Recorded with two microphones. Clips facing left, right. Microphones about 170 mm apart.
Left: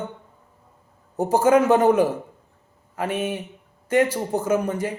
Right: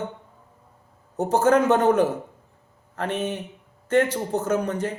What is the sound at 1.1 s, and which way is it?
Speech, 10° left (ahead or behind).